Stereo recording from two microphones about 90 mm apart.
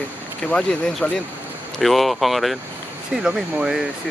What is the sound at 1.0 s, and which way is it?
Speech, 20° left (ahead or behind).